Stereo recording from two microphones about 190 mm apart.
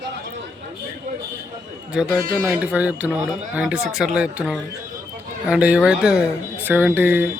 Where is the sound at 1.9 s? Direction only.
Centre (ahead or behind).